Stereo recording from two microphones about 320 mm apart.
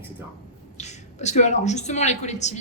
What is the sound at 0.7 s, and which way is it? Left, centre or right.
A woman's voice, left.